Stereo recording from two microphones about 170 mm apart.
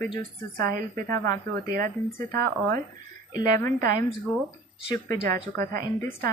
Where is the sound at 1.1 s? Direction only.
15° left (ahead or behind).